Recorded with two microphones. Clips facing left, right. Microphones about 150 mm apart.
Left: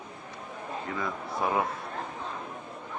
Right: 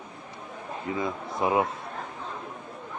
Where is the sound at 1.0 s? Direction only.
20° right (ahead or behind).